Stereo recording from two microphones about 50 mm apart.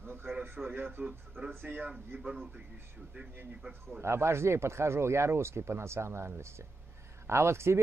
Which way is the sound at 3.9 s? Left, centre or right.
Right.